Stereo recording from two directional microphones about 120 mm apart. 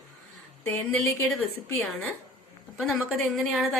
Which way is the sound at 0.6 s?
15° left (ahead or behind).